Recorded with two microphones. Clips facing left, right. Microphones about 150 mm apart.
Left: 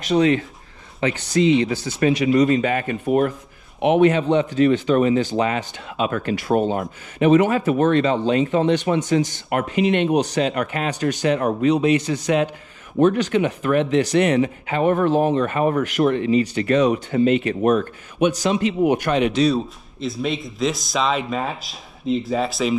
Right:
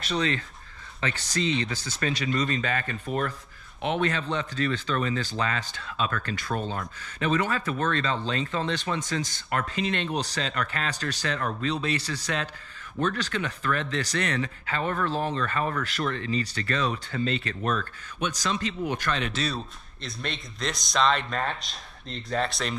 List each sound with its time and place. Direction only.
0.0 s speech: 15° left (ahead or behind)
19.4 s speech: centre (ahead or behind)